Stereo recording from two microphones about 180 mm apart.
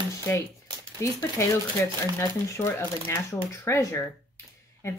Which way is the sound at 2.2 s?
15° left (ahead or behind).